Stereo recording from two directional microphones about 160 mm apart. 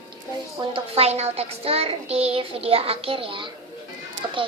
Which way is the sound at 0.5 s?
35° right (ahead or behind).